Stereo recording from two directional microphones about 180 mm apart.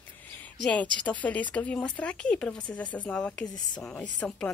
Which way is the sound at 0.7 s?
10° left (ahead or behind).